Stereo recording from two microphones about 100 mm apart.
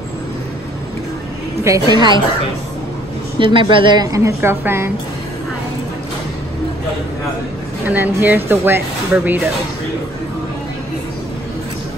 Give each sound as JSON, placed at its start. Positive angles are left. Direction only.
{"t": 1.9, "sound": "a woman's voice", "side_deg": -50}
{"t": 3.3, "sound": "speech", "side_deg": -60}
{"t": 4.1, "sound": "speech", "side_deg": -25}
{"t": 7.8, "sound": "speech", "side_deg": -20}